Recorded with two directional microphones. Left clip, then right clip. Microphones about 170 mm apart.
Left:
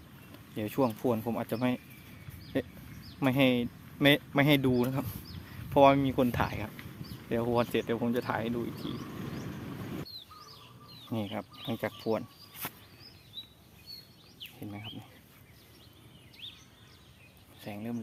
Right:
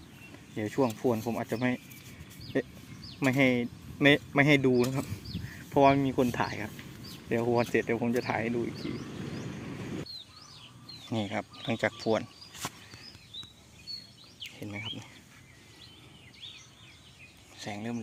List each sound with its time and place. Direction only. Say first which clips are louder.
0.5 s speech: right 1 dB; 15° left (ahead or behind)
3.2 s speech: right 1 dB; 20° left (ahead or behind)
7.3 s speech: right 2 dB; 5° left (ahead or behind)
8.8 s wild animals: right 1 dB; 10° left (ahead or behind)
11.1 s speech: right 3 dB; centre (ahead or behind)
14.6 s speech: right 6 dB; centre (ahead or behind)
17.6 s speech: right 3 dB; centre (ahead or behind)